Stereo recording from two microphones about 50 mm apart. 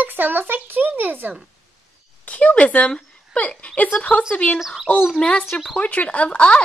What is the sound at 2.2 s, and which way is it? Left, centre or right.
A child's voice, left.